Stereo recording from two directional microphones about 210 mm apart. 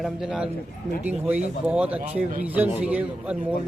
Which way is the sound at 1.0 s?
5° right (ahead or behind).